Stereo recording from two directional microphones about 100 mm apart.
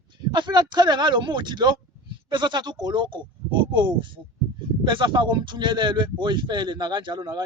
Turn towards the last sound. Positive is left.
turn(degrees=-45)  # may be behind; listen again after turning